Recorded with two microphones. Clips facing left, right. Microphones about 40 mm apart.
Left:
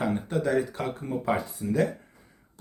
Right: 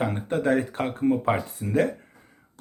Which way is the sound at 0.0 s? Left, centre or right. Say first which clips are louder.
Right 2 dB; right.